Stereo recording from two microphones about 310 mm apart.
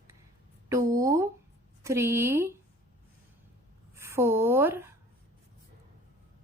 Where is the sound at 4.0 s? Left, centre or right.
Centre.